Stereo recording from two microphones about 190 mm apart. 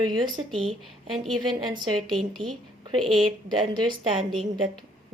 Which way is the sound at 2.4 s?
25° right (ahead or behind).